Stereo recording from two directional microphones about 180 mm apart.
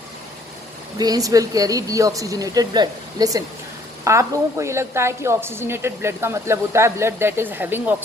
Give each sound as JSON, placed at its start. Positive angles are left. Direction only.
{"t": 0.9, "sound": "a woman's voice", "side_deg": -20}